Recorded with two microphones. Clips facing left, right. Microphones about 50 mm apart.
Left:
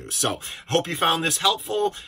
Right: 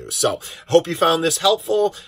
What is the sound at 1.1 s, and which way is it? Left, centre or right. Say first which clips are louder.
Speech: right 5 dB; left.